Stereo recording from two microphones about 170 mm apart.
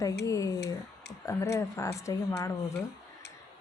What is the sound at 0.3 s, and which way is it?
A woman's voice, 20° left (ahead or behind).